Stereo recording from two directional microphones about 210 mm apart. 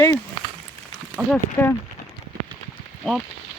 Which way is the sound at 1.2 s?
15° right (ahead or behind).